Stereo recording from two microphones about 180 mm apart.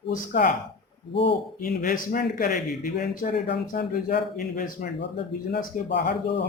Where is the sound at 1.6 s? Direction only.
50° left (ahead or behind).